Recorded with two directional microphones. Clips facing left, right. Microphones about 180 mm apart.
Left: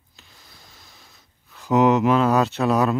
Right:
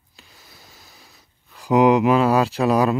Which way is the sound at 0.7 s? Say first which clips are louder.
Right 2 dB; 40° right (ahead or behind).